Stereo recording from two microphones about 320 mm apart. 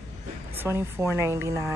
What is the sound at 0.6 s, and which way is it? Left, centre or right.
Speech, centre.